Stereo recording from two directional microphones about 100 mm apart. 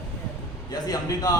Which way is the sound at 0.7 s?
40° left (ahead or behind).